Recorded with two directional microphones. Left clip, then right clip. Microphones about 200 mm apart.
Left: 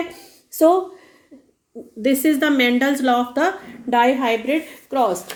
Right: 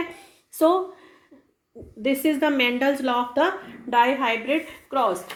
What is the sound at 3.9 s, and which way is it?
Speech, 60° left (ahead or behind).